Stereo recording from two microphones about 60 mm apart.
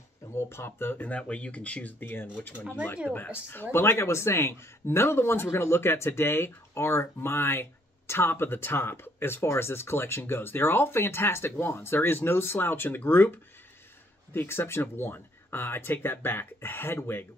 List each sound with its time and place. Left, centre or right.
0.3 s speech: left
1.0 s speech: left
14.3 s speech: left